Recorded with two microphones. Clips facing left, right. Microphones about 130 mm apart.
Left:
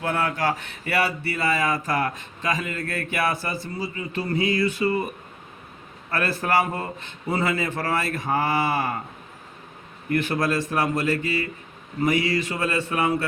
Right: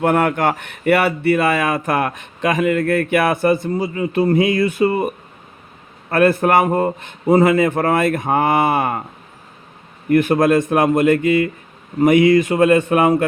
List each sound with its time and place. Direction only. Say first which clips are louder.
0.0 s a man's voice: right 8 dB; 55° right (ahead or behind)
10.1 s a man's voice: right 10 dB; 50° right (ahead or behind)